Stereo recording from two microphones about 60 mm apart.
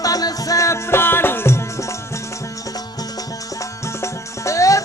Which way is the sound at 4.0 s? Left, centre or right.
Left.